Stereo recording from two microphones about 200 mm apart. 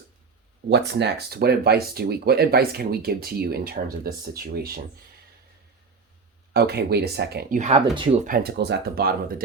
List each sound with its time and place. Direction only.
0.7 s speech: 55° right (ahead or behind)
6.5 s speech: 55° right (ahead or behind)
7.6 s speech: 30° right (ahead or behind)
8.3 s speech: 55° right (ahead or behind)